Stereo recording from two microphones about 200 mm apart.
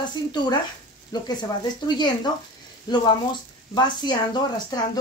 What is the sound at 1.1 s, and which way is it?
Speech, 20° left (ahead or behind).